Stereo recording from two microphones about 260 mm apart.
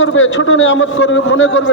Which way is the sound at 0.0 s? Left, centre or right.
Left.